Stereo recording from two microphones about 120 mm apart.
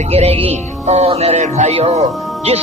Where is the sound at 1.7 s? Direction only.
60° right (ahead or behind).